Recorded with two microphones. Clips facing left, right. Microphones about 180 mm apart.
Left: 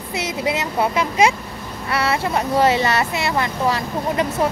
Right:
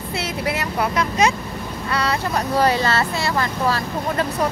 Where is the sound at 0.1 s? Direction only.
20° left (ahead or behind).